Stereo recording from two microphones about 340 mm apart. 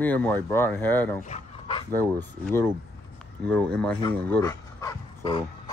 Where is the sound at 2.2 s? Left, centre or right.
Centre.